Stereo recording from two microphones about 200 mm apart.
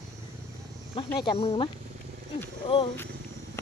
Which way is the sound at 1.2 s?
25° left (ahead or behind).